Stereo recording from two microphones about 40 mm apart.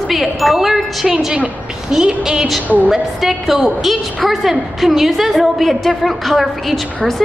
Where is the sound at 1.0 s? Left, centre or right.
Centre.